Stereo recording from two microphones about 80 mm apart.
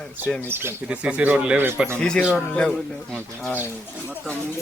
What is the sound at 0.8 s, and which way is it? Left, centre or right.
Speech, centre.